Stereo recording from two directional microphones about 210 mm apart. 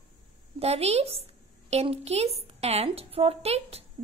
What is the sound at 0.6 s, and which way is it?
A woman's voice, 30° right (ahead or behind).